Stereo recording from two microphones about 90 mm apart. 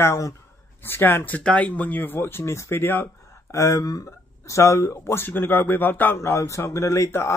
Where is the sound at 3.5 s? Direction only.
35° left (ahead or behind).